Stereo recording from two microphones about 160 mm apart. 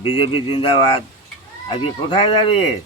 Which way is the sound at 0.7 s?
35° left (ahead or behind).